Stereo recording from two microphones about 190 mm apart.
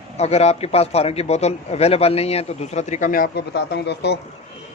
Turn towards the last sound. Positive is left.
turn(degrees=65)  # may be behind; listen again after turning